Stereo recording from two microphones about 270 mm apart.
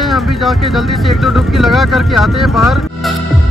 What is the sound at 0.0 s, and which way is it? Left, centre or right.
Speech, centre.